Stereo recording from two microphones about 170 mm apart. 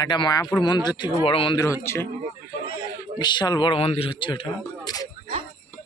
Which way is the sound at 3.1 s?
25° left (ahead or behind).